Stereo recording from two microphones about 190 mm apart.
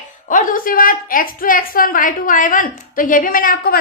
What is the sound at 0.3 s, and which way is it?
A woman's voice, 45° left (ahead or behind).